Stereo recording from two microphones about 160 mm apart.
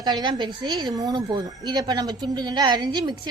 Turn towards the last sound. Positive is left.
turn(degrees=-25)  # may be behind; listen again after turning